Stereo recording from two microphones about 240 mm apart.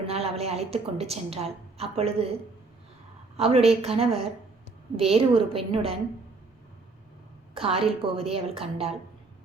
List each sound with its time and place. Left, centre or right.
0.0 s a woman's voice: right
3.3 s a woman's voice: right
7.5 s a woman's voice: right